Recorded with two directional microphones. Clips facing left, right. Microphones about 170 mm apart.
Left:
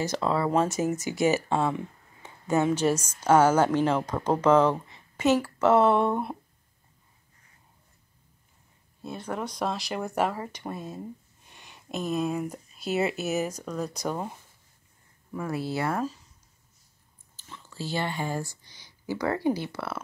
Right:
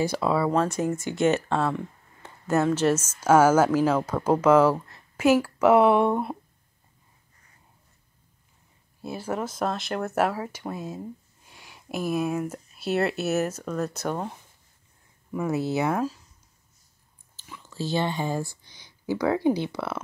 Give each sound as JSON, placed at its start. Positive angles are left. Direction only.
{"t": 0.0, "sound": "speech", "side_deg": -10}
{"t": 0.5, "sound": "speech", "side_deg": 5}
{"t": 9.0, "sound": "speech", "side_deg": -5}
{"t": 15.5, "sound": "speech", "side_deg": -20}
{"t": 17.9, "sound": "speech", "side_deg": -20}
{"t": 18.7, "sound": "a sound", "side_deg": 10}
{"t": 19.0, "sound": "speech", "side_deg": -10}